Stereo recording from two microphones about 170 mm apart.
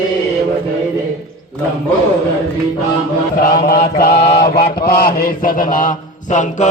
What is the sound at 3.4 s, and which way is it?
Mantra, 60° left (ahead or behind).